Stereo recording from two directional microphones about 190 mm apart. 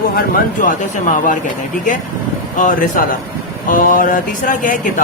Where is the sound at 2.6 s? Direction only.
40° left (ahead or behind).